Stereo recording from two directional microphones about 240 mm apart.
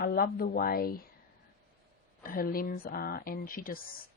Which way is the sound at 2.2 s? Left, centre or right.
Left.